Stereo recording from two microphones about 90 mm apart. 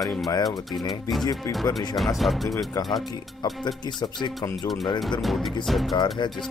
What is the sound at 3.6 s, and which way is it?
Speech, 55° left (ahead or behind).